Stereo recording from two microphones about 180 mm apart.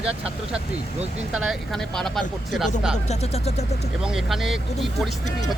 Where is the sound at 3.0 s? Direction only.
35° left (ahead or behind).